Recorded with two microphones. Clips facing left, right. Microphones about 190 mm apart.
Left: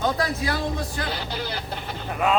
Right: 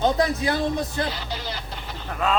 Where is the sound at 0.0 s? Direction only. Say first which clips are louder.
Right 3 dB; 20° right (ahead or behind).